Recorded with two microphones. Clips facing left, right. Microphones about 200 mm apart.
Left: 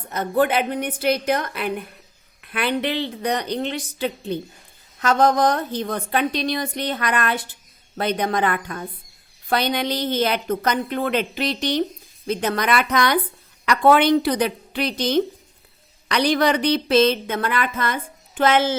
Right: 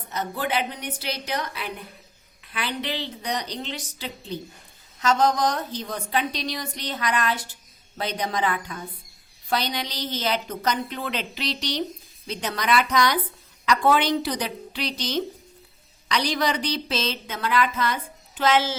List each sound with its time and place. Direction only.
0.1 s a woman's voice: 55° left (ahead or behind)